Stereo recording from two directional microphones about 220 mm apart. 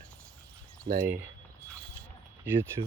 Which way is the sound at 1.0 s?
10° right (ahead or behind).